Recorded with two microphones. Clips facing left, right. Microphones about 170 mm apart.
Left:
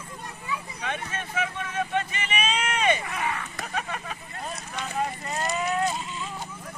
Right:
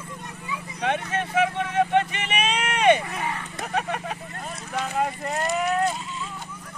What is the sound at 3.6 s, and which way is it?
Vehicle, 55° right (ahead or behind).